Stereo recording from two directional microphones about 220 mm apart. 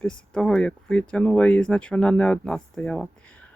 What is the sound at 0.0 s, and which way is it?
Speech, 5° left (ahead or behind).